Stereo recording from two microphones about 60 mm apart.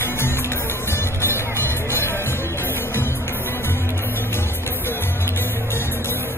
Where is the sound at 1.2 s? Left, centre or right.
Left.